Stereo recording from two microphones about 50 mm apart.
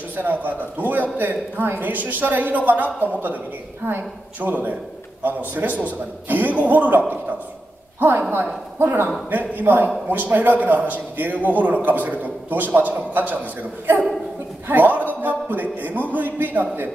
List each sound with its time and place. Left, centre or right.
0.1 s a man's voice: right
8.7 s speech: right
9.3 s a man's voice: right